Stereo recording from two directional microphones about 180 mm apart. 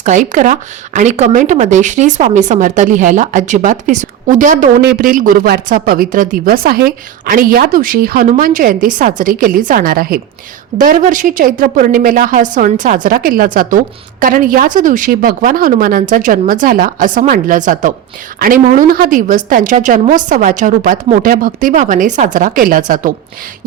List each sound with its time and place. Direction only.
0.0 s a woman's voice: 45° right (ahead or behind)